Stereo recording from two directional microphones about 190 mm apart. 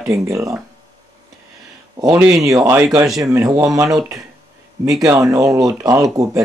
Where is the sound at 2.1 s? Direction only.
Centre (ahead or behind).